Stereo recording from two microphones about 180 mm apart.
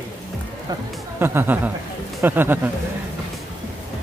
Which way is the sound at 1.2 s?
10° right (ahead or behind).